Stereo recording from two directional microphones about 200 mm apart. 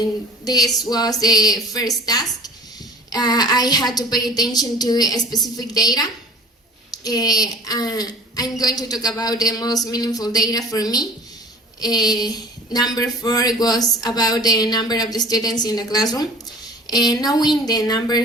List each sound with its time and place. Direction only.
0.4 s a woman's voice: 20° left (ahead or behind)